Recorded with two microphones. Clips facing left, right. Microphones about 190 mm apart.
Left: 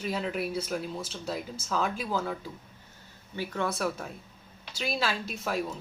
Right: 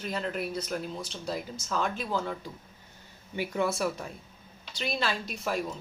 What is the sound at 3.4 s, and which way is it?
Speech, 15° right (ahead or behind).